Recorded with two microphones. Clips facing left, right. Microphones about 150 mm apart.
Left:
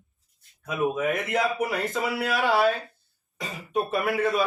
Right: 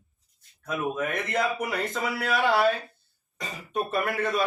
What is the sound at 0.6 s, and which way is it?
A man's voice, 5° left (ahead or behind).